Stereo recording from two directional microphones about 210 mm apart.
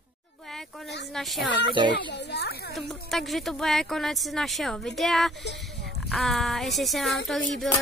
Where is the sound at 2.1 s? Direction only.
55° left (ahead or behind).